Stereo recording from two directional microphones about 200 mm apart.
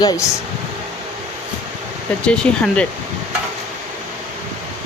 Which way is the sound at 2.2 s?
5° left (ahead or behind).